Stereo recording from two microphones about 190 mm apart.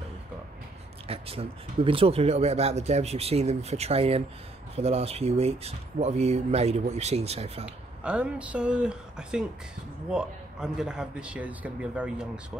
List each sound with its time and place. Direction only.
1.0 s speech: 30° right (ahead or behind)
7.6 s speech: 5° right (ahead or behind)